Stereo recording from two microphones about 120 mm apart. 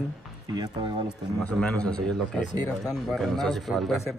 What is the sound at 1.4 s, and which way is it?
A man's voice, 5° left (ahead or behind).